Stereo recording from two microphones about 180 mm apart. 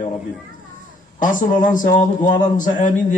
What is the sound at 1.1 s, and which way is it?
A man's voice, 50° left (ahead or behind).